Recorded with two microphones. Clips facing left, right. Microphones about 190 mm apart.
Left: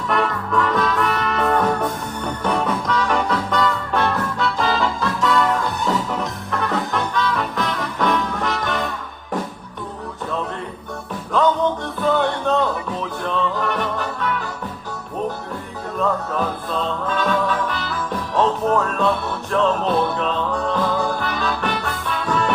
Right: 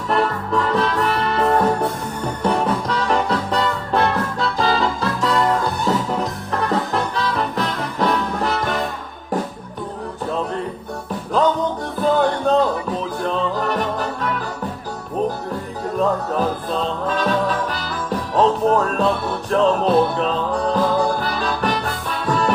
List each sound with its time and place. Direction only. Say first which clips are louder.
0.1 s music: right 2 dB; 30° right (ahead or behind)
11.9 s music: right 4 dB; 35° right (ahead or behind)
16.0 s music: right 2 dB; 35° right (ahead or behind)